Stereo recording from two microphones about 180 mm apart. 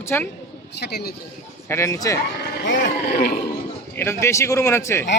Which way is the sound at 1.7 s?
15° left (ahead or behind).